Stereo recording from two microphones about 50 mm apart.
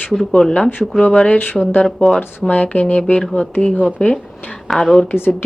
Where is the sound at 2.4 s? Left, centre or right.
Left.